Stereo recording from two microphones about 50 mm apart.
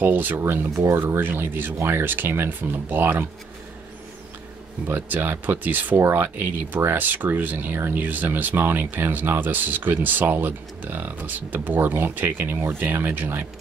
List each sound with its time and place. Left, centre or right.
0.0 s speech: right
0.7 s speech: right
1.0 s speech: right
4.8 s speech: right